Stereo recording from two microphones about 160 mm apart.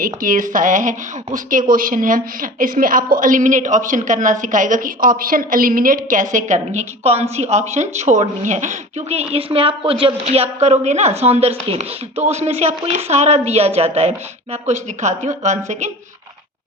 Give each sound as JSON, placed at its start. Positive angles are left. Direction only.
{"t": 0.0, "sound": "a woman's voice", "side_deg": -60}